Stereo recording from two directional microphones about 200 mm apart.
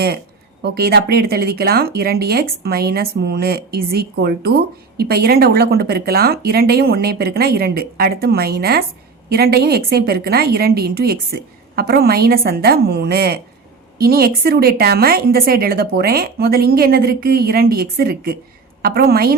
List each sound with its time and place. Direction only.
0.6 s speech: 50° right (ahead or behind)